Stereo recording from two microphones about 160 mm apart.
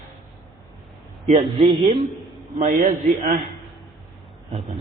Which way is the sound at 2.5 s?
55° right (ahead or behind).